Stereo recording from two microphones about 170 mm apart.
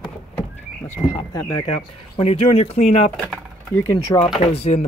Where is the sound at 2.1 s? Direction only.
35° left (ahead or behind).